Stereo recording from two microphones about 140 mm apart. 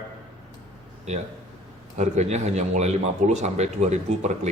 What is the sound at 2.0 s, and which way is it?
Speech, 55° right (ahead or behind).